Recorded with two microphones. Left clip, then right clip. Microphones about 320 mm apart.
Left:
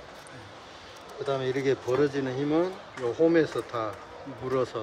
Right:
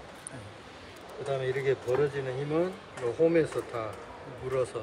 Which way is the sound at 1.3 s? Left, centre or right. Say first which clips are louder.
Left 1 dB; left.